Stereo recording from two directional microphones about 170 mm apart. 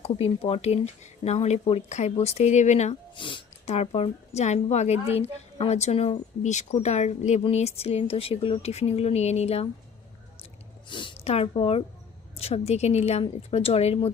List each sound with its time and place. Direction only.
0.0 s speech: 35° left (ahead or behind)
10.8 s a woman's voice: 30° left (ahead or behind)